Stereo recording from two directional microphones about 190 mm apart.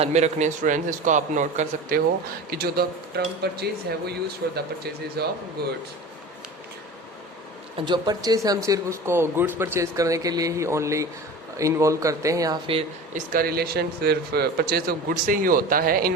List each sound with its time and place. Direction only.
0.0 s a man's voice: 35° right (ahead or behind)
2.5 s speech: 55° right (ahead or behind)
7.8 s speech: 25° right (ahead or behind)
13.1 s a man's voice: 50° right (ahead or behind)